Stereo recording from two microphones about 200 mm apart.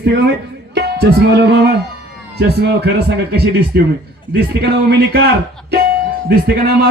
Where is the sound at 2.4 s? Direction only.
55° right (ahead or behind).